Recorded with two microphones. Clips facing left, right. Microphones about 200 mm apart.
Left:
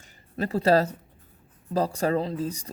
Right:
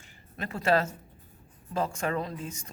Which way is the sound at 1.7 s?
35° left (ahead or behind).